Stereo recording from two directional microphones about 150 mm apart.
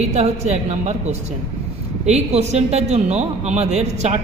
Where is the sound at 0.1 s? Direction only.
50° right (ahead or behind).